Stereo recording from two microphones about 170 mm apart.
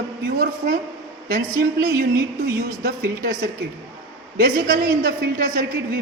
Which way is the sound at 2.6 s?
70° right (ahead or behind).